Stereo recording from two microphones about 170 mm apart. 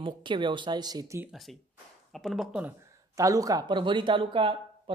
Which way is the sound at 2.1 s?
Centre (ahead or behind).